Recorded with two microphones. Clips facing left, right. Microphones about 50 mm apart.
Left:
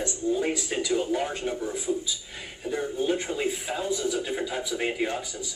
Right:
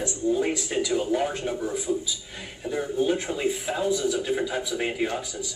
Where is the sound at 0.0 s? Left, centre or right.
Centre.